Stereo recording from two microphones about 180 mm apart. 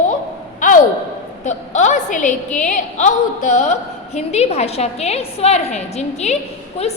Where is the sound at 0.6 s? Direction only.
50° left (ahead or behind).